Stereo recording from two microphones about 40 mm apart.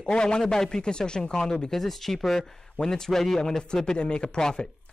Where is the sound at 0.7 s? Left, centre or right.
Centre.